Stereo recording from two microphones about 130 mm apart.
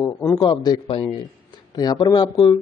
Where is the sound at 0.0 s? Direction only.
25° left (ahead or behind).